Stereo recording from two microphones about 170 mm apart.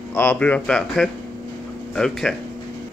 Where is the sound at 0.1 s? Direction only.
10° left (ahead or behind).